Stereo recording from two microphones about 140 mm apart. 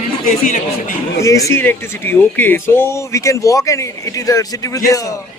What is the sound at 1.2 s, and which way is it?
Speech, 20° left (ahead or behind).